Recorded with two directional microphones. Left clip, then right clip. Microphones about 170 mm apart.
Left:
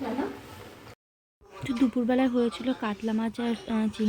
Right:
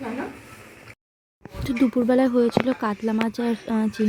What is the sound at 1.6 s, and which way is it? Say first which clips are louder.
Speech: right 5 dB; 30° right (ahead or behind).